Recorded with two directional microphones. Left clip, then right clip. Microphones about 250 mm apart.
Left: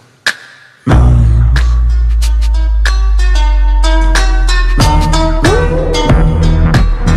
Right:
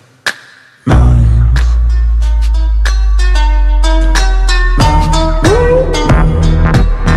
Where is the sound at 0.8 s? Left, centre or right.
Centre.